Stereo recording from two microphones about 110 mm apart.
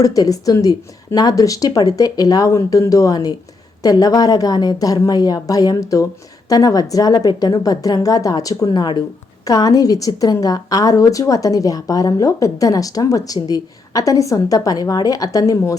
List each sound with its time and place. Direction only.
0.0 s a woman's voice: 35° left (ahead or behind)